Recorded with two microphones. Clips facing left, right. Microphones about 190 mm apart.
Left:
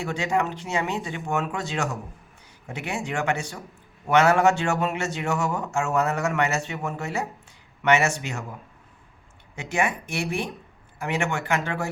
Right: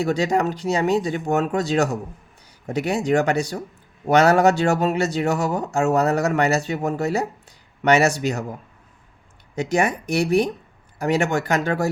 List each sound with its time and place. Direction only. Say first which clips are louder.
0.0 s speech: right 5 dB; 40° right (ahead or behind)
9.6 s speech: right 5 dB; 40° right (ahead or behind)